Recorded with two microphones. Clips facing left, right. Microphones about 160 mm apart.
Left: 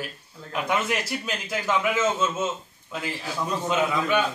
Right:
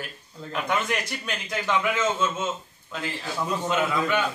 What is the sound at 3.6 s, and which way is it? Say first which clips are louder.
Speech: left 1 dB; 15° left (ahead or behind).